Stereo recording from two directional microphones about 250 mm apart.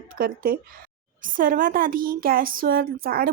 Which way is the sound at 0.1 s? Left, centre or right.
Right.